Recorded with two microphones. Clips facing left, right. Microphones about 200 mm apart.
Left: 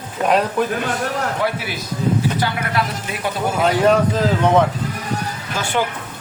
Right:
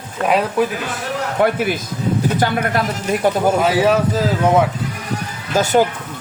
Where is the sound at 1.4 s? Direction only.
50° right (ahead or behind).